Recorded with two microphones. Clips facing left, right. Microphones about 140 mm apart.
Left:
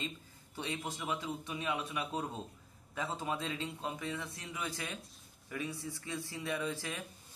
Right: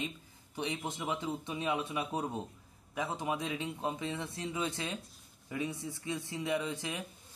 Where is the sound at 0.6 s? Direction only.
20° right (ahead or behind).